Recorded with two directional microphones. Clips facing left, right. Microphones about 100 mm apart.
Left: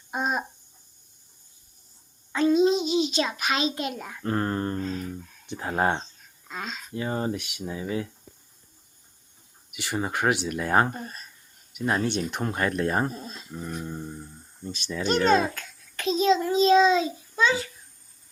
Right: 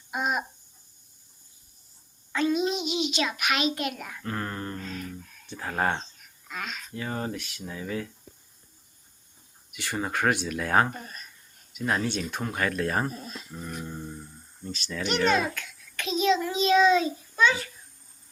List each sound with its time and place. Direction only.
0.1 s a child's voice: 30° left (ahead or behind)
2.3 s a child's voice: 30° left (ahead or behind)
5.0 s speech: 20° left (ahead or behind)
9.7 s speech: 10° left (ahead or behind)
10.8 s speech: 35° left (ahead or behind)
15.0 s a child's voice: 35° left (ahead or behind)